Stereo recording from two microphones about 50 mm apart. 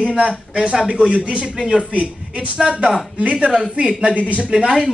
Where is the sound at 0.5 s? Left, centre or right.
Centre.